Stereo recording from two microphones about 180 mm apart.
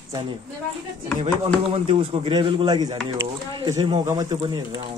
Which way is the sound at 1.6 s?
30° right (ahead or behind).